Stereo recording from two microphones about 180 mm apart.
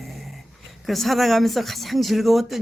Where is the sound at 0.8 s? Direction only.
Centre (ahead or behind).